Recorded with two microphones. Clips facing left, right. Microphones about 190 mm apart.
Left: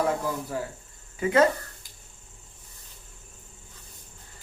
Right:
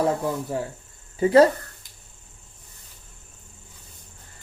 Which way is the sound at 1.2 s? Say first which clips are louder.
Right 6 dB; 35° right (ahead or behind).